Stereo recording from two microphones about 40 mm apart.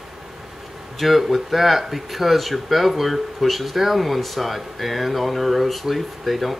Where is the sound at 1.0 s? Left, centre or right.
Centre.